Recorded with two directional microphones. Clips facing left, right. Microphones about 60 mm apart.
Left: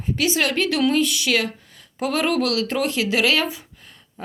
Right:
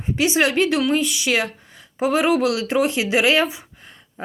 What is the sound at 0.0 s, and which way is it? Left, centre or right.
Speech, right.